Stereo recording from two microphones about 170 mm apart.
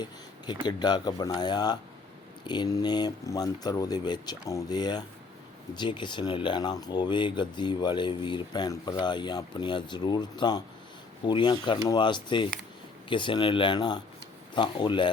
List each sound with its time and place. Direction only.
0.0 s speech: 25° left (ahead or behind)